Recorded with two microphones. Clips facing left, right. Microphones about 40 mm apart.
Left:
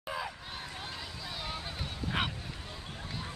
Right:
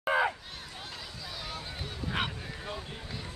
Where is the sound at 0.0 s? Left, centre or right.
Right.